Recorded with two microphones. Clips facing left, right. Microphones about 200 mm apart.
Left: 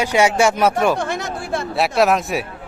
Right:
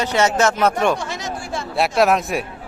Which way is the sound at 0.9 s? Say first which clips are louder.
Left 4 dB; 55° left (ahead or behind).